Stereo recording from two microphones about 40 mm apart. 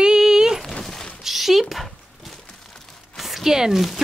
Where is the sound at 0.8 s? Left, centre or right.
Centre.